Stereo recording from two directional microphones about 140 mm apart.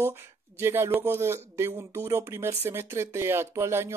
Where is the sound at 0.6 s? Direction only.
15° right (ahead or behind).